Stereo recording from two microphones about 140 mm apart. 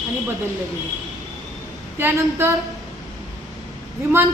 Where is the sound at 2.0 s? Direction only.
15° right (ahead or behind).